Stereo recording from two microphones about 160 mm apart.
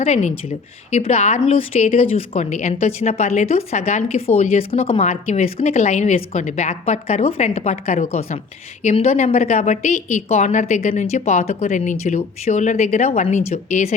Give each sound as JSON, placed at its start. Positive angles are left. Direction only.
{"t": 0.0, "sound": "a woman's voice", "side_deg": 40}